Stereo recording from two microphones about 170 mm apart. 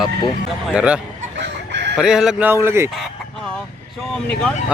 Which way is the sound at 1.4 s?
90° right.